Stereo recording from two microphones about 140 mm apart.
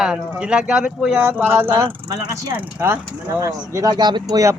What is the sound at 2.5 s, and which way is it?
Speech, 15° right (ahead or behind).